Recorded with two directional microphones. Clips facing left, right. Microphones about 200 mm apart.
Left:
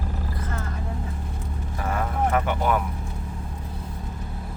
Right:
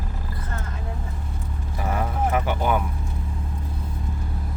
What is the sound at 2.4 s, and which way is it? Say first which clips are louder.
Vehicle: even; centre (ahead or behind).